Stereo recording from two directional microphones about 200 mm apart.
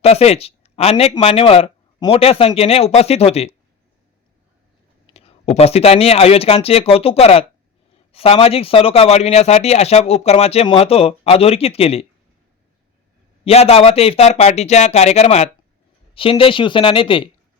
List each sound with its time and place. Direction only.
0.0 s speech: 30° left (ahead or behind)
5.1 s speech: 30° left (ahead or behind)
13.4 s speech: 30° left (ahead or behind)